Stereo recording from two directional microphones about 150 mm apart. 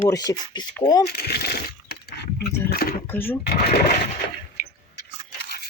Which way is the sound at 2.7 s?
90° left.